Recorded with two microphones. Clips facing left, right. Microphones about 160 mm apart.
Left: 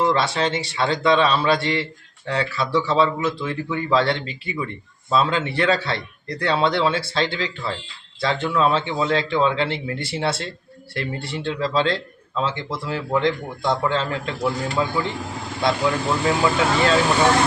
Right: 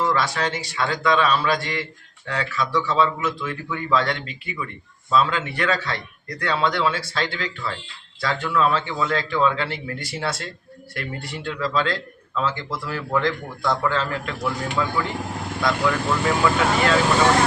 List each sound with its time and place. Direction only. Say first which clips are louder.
0.0 s a man's voice: left 3 dB; 25° left (ahead or behind)